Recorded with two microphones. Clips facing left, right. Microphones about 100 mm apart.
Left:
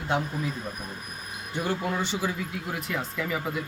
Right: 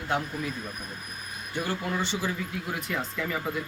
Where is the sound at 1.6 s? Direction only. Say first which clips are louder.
Left 2 dB; 15° left (ahead or behind).